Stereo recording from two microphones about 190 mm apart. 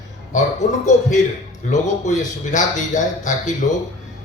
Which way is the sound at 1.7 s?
40° left (ahead or behind).